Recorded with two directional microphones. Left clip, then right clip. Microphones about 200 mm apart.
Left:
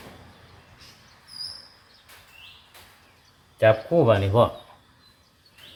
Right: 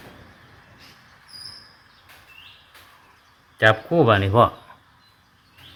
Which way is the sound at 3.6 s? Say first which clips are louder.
Right 1 dB; 20° right (ahead or behind).